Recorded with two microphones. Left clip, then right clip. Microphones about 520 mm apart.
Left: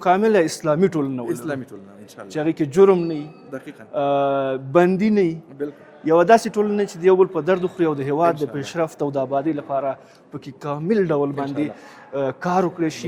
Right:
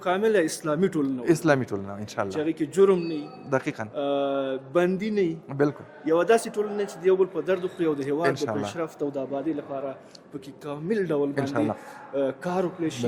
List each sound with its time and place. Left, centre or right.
0.0 s speech: left
1.2 s speech: right
2.2 s speech: left
3.5 s speech: right
3.9 s speech: left
5.6 s a man's voice: right
6.1 s a man's voice: left
10.6 s a man's voice: left